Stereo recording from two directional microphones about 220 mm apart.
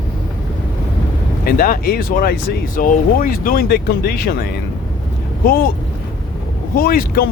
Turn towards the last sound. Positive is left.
turn(degrees=40)  # may be behind; listen again after turning